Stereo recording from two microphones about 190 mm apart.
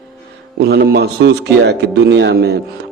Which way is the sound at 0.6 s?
55° right (ahead or behind).